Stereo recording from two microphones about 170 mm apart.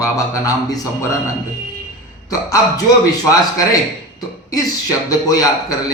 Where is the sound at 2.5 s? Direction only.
20° left (ahead or behind).